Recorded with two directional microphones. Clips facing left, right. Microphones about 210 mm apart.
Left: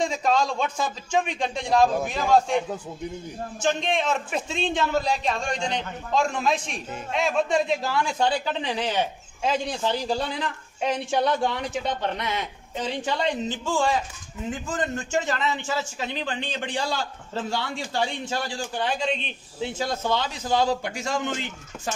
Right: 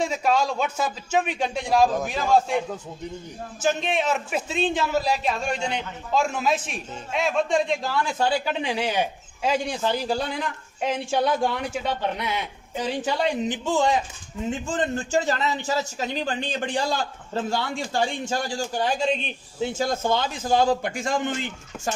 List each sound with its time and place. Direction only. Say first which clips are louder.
0.0 s a man's voice: even; 10° right (ahead or behind)
3.6 s a man's voice: right 1 dB; 5° right (ahead or behind); by 21.3 s 50° right (ahead or behind)